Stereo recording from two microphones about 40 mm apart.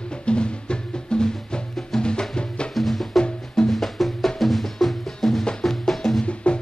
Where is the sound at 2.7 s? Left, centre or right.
Centre.